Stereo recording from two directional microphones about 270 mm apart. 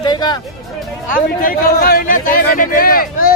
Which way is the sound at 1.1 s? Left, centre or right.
Left.